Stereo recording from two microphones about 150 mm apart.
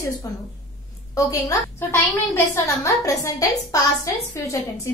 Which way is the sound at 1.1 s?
20° left (ahead or behind).